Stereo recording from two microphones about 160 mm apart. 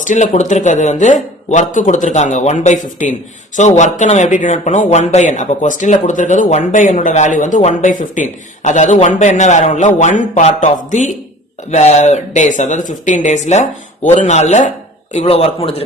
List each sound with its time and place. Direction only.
0.0 s a man's voice: 50° left (ahead or behind)